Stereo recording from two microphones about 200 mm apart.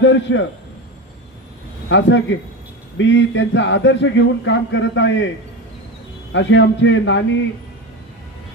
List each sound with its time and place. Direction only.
0.0 s a man's voice: 65° left (ahead or behind)
1.9 s a man's voice: 65° left (ahead or behind)
6.3 s a man's voice: 65° left (ahead or behind)